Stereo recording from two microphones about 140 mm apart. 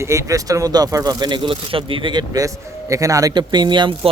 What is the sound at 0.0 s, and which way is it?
Speech, 20° right (ahead or behind).